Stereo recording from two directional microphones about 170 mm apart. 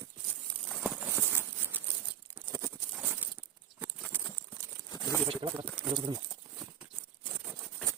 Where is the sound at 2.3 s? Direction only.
15° right (ahead or behind).